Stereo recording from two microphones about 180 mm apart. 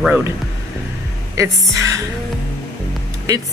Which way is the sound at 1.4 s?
15° right (ahead or behind).